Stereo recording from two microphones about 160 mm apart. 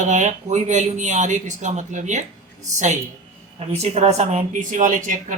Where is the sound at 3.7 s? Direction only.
45° right (ahead or behind).